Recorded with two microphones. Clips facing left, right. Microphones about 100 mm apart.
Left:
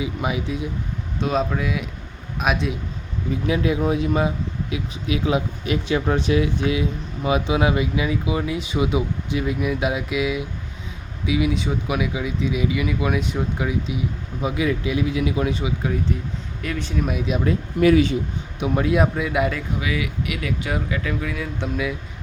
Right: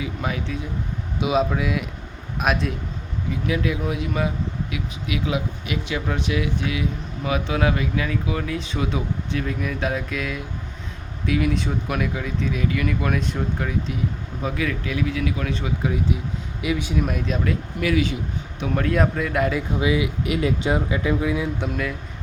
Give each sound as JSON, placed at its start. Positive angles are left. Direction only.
{"t": 0.0, "sound": "speech", "side_deg": 15}
{"t": 1.2, "sound": "speech", "side_deg": -5}
{"t": 3.4, "sound": "speech", "side_deg": 25}
{"t": 15.8, "sound": "speech", "side_deg": -5}
{"t": 17.4, "sound": "speech", "side_deg": 30}
{"t": 18.6, "sound": "speech", "side_deg": 15}
{"t": 19.5, "sound": "speech", "side_deg": -25}